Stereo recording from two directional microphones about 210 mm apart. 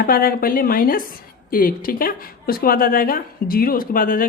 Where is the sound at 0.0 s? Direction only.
45° left (ahead or behind).